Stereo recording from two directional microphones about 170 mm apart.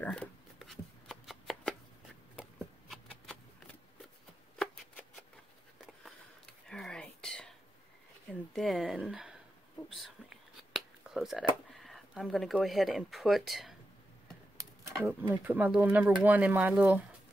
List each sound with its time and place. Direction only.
0.0 s shuffling cards: 5° left (ahead or behind)
2.9 s shuffling cards: centre (ahead or behind)
5.9 s whispering: centre (ahead or behind)
8.3 s speech: centre (ahead or behind)
9.8 s whispering: centre (ahead or behind)
11.7 s speech: centre (ahead or behind)
15.0 s speech: 10° right (ahead or behind)